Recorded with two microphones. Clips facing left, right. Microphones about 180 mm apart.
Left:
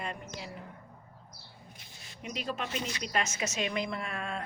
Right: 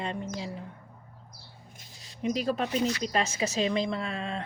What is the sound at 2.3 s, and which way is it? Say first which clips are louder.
A woman's voice: right 7 dB; 35° right (ahead or behind).